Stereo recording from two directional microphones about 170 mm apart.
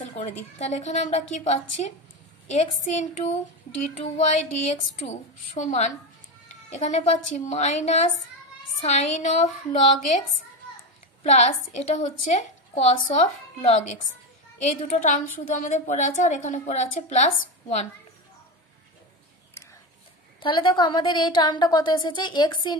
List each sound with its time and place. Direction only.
0.0 s a woman's voice: 45° left (ahead or behind)
11.2 s a woman's voice: 40° left (ahead or behind)
19.6 s whispering: 15° left (ahead or behind)
20.3 s a woman's voice: 30° left (ahead or behind)